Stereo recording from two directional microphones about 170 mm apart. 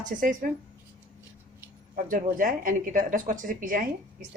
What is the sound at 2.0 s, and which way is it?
A woman's voice, 50° right (ahead or behind).